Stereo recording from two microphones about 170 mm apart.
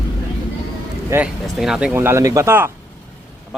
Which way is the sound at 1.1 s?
10° right (ahead or behind).